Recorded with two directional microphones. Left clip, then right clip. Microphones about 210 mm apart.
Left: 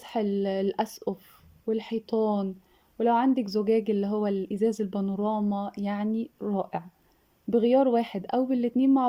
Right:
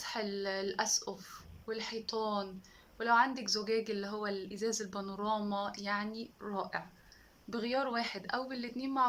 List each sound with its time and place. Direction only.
0.0 s speech: 45° left (ahead or behind)